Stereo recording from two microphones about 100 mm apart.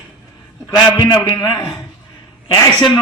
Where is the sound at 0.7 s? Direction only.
40° left (ahead or behind).